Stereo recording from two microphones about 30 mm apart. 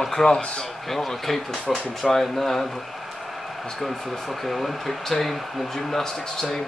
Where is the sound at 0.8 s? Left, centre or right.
Centre.